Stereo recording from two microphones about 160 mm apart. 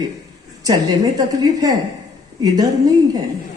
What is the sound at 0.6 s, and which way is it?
Speech, 25° right (ahead or behind).